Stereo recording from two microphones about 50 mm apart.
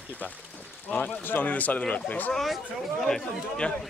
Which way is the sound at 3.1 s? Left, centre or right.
Centre.